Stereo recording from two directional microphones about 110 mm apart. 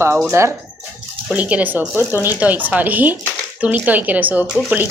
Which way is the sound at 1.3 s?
15° right (ahead or behind).